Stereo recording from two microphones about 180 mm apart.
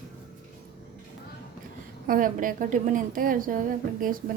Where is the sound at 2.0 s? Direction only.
50° right (ahead or behind).